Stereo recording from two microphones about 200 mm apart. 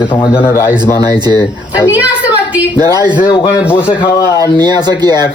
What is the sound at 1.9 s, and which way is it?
Speech, 10° right (ahead or behind).